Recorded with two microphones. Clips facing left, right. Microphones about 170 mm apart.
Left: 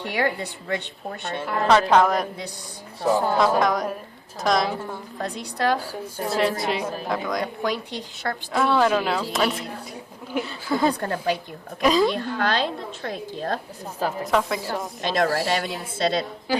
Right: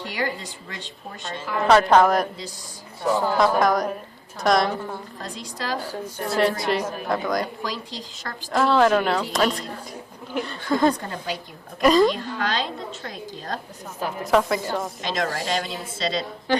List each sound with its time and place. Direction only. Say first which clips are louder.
0.0 s a woman's voice: left 3 dB; 65° left (ahead or behind)
1.6 s speech: right 2 dB; centre (ahead or behind)
3.6 s speech: right 2 dB; centre (ahead or behind)
5.2 s a woman's voice: left 10 dB; 65° left (ahead or behind)
5.8 s speech: even; 10° left (ahead or behind)
7.4 s a woman's voice: left 4 dB; 60° left (ahead or behind)
8.5 s speech: right 2 dB; centre (ahead or behind)
11.0 s a woman's voice: left 6 dB; 60° left (ahead or behind)
11.8 s speech: right 3 dB; 5° left (ahead or behind)
12.1 s a woman's voice: left 3 dB; 55° left (ahead or behind)
14.3 s speech: right 6 dB; centre (ahead or behind)
15.0 s a woman's voice: left 8 dB; 55° left (ahead or behind)